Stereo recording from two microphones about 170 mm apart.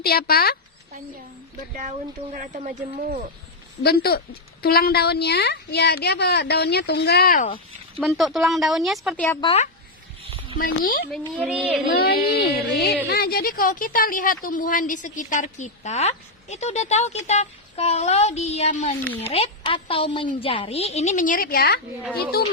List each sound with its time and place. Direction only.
0.0 s speech: 65° left (ahead or behind)
2.3 s speech: 50° right (ahead or behind)
3.8 s a woman's voice: 65° left (ahead or behind)
8.0 s speech: centre (ahead or behind)
9.4 s speech: 35° left (ahead or behind)
10.6 s speech: 55° left (ahead or behind)
11.3 s speech: 5° right (ahead or behind)
11.9 s a woman's voice: 70° left (ahead or behind)
13.1 s speech: 65° left (ahead or behind); by 18.9 s 40° left (ahead or behind)
19.0 s speech: 10° left (ahead or behind)
19.3 s speech: 35° left (ahead or behind); by 22.5 s 65° left (ahead or behind)